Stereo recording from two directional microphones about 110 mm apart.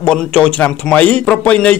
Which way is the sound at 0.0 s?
10° left (ahead or behind).